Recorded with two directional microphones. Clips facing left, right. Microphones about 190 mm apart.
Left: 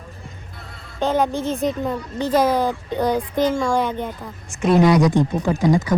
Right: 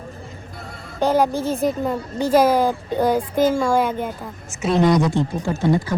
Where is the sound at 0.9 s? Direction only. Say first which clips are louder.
Right 2 dB; centre (ahead or behind).